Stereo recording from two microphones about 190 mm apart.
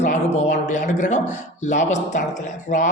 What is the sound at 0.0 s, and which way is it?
A man's voice, 35° left (ahead or behind).